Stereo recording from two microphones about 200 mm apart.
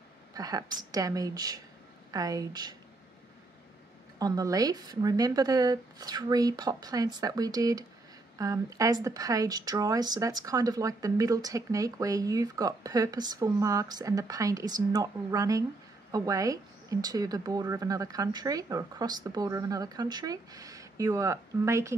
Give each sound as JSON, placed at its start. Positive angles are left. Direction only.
{"t": 0.3, "sound": "a woman's voice", "side_deg": -20}
{"t": 4.2, "sound": "a woman's voice", "side_deg": -20}